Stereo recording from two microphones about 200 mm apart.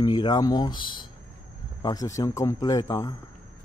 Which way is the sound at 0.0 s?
20° left (ahead or behind).